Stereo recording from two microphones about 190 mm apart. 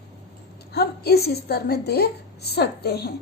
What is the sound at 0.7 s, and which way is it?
A woman's voice, 55° left (ahead or behind).